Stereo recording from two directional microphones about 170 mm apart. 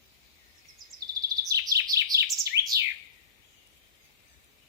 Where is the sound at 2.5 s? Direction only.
15° right (ahead or behind).